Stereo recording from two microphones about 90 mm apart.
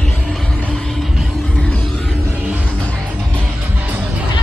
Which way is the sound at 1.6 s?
10° left (ahead or behind).